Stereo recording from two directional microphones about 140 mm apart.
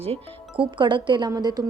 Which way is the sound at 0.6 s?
35° right (ahead or behind).